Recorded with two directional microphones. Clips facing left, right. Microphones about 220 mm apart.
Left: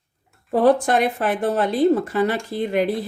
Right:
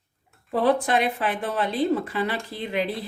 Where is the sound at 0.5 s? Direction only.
45° left (ahead or behind).